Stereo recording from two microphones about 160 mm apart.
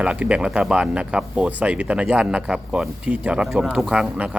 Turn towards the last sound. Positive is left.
turn(degrees=-5)  # may be behind; listen again after turning